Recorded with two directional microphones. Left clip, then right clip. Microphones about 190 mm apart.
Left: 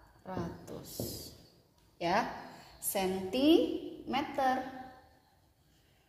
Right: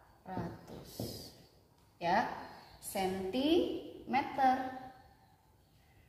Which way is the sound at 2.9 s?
50° left (ahead or behind).